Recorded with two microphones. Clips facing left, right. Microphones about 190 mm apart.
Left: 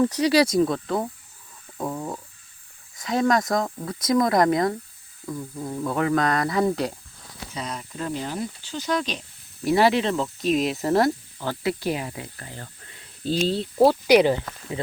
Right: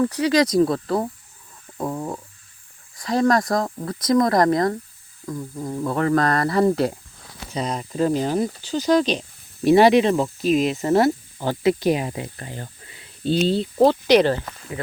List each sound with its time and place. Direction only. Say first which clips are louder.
0.0 s speech: right 1 dB; 20° left (ahead or behind)
0.5 s speech: right 3 dB; centre (ahead or behind)
3.0 s speech: right 3 dB; centre (ahead or behind)
7.5 s speech: right 7 dB; 35° right (ahead or behind)
9.6 s speech: right 6 dB; 20° right (ahead or behind)
10.4 s speech: right 2 dB; centre (ahead or behind)
11.3 s speech: right 6 dB; 20° right (ahead or behind)
12.9 s speech: right 4 dB; centre (ahead or behind)
14.1 s speech: right 1 dB; 10° left (ahead or behind)